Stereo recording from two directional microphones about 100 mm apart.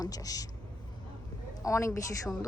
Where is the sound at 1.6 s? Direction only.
30° left (ahead or behind).